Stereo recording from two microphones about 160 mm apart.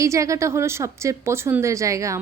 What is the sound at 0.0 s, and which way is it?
Speech, 20° right (ahead or behind).